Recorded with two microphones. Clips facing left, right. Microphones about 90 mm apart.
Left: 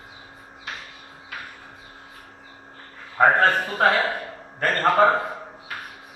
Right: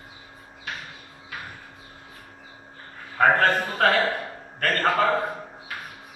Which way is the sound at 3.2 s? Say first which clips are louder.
Left 2 dB; 20° left (ahead or behind).